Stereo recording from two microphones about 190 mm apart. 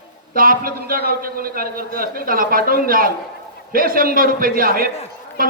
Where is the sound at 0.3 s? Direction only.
50° right (ahead or behind).